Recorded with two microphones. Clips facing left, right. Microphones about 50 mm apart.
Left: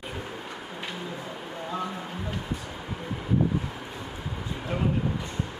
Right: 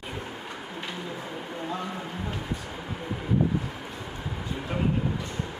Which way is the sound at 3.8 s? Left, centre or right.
Centre.